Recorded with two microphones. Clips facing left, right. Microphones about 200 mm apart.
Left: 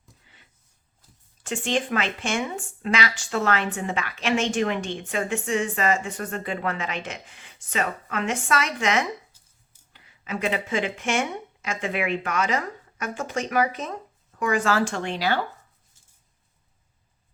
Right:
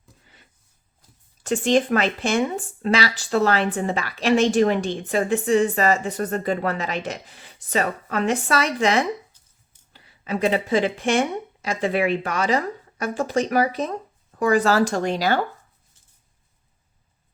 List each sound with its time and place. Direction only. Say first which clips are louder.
1.5 s speech: right 7 dB; 40° right (ahead or behind)